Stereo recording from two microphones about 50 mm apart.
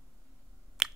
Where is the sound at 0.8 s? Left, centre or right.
Centre.